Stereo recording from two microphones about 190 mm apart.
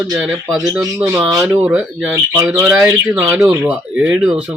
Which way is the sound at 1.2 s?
5° right (ahead or behind).